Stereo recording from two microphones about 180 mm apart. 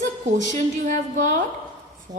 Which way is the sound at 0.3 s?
45° right (ahead or behind).